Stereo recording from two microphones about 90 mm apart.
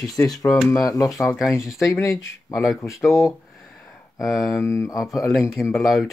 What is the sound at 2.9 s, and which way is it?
Speech, centre (ahead or behind).